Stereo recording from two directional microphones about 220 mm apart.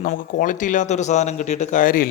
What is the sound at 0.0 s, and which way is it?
A man's voice, 35° left (ahead or behind).